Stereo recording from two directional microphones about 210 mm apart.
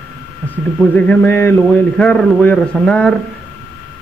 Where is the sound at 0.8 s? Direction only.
5° left (ahead or behind).